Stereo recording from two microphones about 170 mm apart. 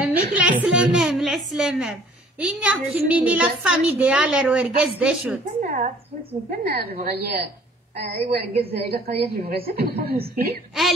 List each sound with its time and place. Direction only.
0.0 s a woman's voice: 10° right (ahead or behind)
5.6 s a woman's voice: 50° right (ahead or behind)
6.6 s a woman's voice: 65° right (ahead or behind)